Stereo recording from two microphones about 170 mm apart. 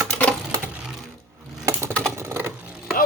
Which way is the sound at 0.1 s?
5° left (ahead or behind).